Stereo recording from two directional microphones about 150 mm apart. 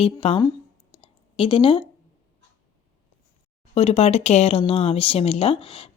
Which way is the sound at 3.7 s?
45° left (ahead or behind).